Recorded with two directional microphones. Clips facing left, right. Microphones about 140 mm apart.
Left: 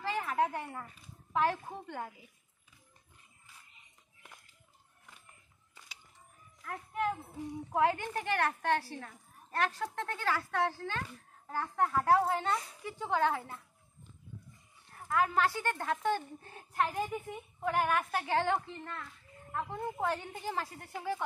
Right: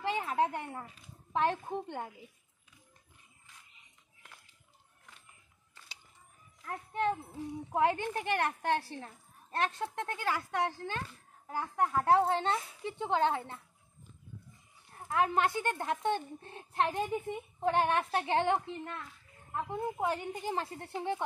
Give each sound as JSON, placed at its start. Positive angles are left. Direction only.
{"t": 0.0, "sound": "a sound", "side_deg": -25}
{"t": 1.3, "sound": "a woman's voice", "side_deg": -25}
{"t": 6.6, "sound": "a child's voice", "side_deg": -25}
{"t": 15.0, "sound": "a woman's voice", "side_deg": -25}